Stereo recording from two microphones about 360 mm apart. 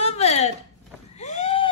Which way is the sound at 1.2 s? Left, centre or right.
Centre.